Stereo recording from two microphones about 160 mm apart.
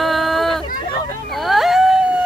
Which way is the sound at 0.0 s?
Centre (ahead or behind).